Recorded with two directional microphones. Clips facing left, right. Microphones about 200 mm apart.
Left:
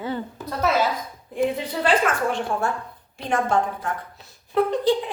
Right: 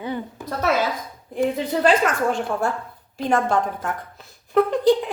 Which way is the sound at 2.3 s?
45° right (ahead or behind).